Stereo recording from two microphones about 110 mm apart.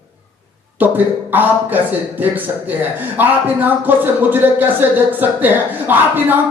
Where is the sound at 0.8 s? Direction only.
15° right (ahead or behind).